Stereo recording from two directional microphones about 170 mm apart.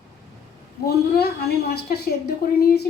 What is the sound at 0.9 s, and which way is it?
A woman's voice, 70° left (ahead or behind).